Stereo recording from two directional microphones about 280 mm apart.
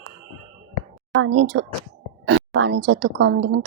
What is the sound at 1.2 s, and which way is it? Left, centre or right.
Speech, right.